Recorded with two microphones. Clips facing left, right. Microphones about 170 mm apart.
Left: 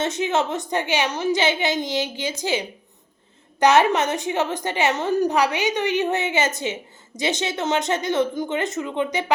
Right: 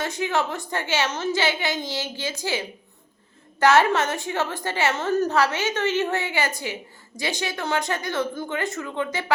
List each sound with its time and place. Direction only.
0.0 s a woman's voice: 20° left (ahead or behind)